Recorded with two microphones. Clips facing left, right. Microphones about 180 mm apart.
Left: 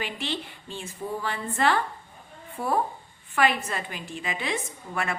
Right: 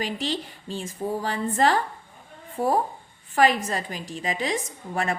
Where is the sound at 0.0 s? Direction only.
40° right (ahead or behind).